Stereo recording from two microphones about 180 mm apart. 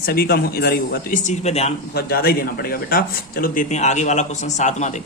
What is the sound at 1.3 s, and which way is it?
Speech, 35° left (ahead or behind).